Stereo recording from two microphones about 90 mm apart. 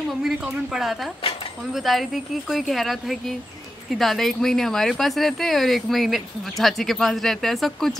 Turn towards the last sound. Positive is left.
turn(degrees=5)  # may be behind; listen again after turning